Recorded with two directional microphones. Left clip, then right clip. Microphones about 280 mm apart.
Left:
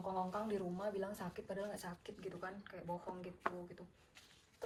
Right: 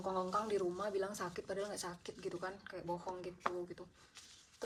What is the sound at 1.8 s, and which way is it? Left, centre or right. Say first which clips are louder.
Speech: right 4 dB; centre.